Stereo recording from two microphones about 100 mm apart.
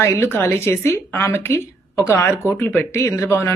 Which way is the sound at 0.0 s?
25° left (ahead or behind).